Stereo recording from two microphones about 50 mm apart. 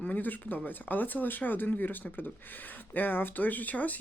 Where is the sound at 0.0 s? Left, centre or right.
Left.